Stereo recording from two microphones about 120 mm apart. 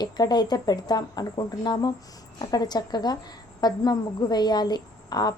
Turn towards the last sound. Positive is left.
turn(degrees=35)  # may be behind; listen again after turning